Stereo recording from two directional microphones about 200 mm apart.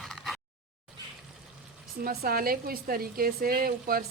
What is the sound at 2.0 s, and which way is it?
Speech, 45° right (ahead or behind).